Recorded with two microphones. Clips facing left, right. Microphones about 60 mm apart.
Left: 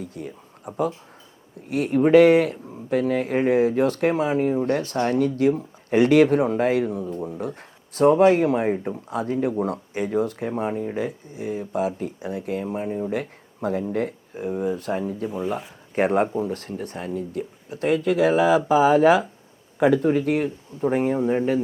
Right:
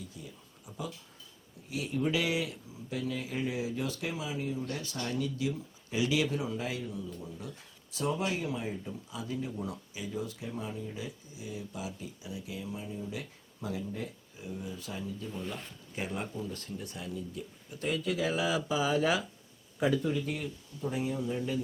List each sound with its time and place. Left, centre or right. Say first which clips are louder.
0.0 s speech: left 12 dB; left